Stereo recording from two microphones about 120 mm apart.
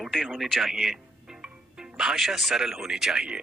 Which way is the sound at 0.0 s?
Centre (ahead or behind).